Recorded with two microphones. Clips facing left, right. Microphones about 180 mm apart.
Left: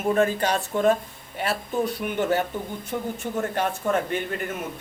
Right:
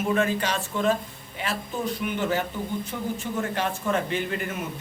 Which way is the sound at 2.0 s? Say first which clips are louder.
Left 2 dB; 45° left (ahead or behind).